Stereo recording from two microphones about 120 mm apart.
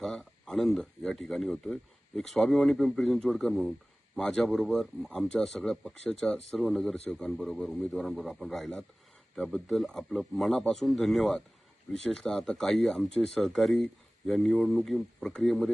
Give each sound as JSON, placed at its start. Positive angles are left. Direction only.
{"t": 0.0, "sound": "speech", "side_deg": 0}